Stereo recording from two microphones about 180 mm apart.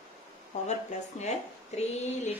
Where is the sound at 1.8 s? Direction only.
40° left (ahead or behind).